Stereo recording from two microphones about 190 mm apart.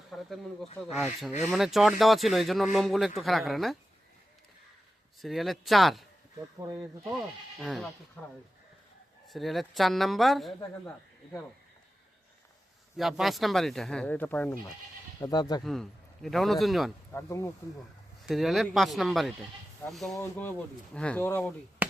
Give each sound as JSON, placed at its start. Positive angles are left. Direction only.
{"t": 0.1, "sound": "speech", "side_deg": 0}
{"t": 5.2, "sound": "speech", "side_deg": 0}
{"t": 7.6, "sound": "speech", "side_deg": 0}
{"t": 9.2, "sound": "speech", "side_deg": 0}
{"t": 13.0, "sound": "speech", "side_deg": 0}
{"t": 15.2, "sound": "speech", "side_deg": 20}
{"t": 15.6, "sound": "speech", "side_deg": 0}
{"t": 17.1, "sound": "speech", "side_deg": 15}
{"t": 18.3, "sound": "speech", "side_deg": 0}
{"t": 21.8, "sound": "chop", "side_deg": -10}